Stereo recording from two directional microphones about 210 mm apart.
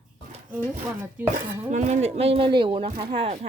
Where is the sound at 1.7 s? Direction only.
35° right (ahead or behind).